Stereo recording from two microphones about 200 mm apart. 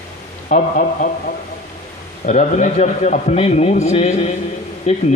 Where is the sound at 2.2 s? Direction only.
40° left (ahead or behind).